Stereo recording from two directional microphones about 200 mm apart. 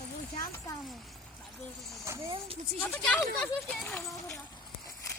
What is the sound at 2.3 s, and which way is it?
Speech, 30° right (ahead or behind).